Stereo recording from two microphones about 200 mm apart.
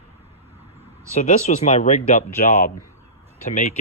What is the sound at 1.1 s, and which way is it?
Speech, 35° left (ahead or behind).